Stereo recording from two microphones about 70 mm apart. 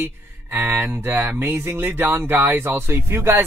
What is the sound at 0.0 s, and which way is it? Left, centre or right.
Speech, right.